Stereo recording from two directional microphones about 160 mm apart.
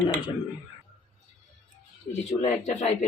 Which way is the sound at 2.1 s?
45° left (ahead or behind).